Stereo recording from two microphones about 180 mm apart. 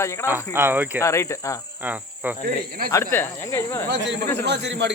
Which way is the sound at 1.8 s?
10° right (ahead or behind).